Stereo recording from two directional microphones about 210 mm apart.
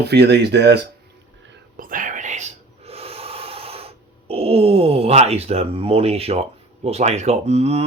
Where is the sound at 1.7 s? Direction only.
40° right (ahead or behind).